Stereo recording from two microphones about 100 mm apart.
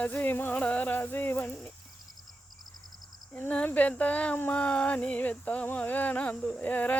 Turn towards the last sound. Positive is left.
turn(degrees=15)  # may be behind; listen again after turning